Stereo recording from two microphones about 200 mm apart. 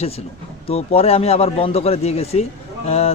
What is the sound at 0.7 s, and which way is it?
Speech, 30° left (ahead or behind).